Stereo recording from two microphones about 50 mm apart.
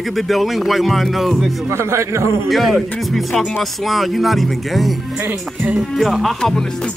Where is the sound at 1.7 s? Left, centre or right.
Right.